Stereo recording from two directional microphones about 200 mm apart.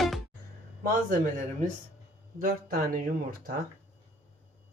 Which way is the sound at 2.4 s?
45° right (ahead or behind).